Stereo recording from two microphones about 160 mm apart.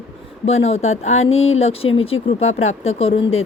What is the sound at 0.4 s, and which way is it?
A woman's voice, 40° left (ahead or behind).